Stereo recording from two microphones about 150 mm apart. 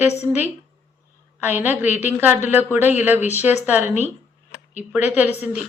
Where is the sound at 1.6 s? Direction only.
15° right (ahead or behind).